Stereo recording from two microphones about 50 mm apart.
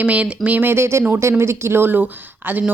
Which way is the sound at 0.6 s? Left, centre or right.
Right.